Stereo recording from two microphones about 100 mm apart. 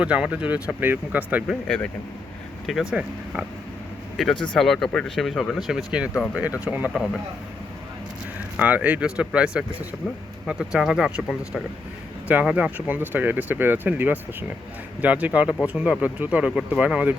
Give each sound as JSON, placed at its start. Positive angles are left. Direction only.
{"t": 0.0, "sound": "speech", "side_deg": -10}
{"t": 1.6, "sound": "speech", "side_deg": 10}
{"t": 4.2, "sound": "speech", "side_deg": 0}
{"t": 6.9, "sound": "speech", "side_deg": 0}
{"t": 8.5, "sound": "speech", "side_deg": -15}